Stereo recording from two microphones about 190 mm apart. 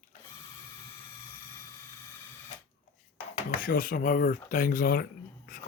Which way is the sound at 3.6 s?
45° left (ahead or behind).